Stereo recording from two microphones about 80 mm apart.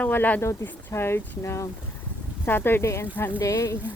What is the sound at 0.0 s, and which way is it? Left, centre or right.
Speech, left.